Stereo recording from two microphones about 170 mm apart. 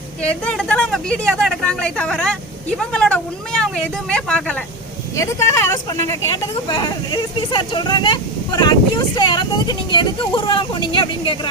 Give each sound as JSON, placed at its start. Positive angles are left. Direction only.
{"t": 0.2, "sound": "speech", "side_deg": 5}
{"t": 5.1, "sound": "speech", "side_deg": 15}